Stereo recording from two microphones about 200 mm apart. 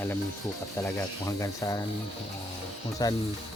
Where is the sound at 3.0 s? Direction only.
20° left (ahead or behind).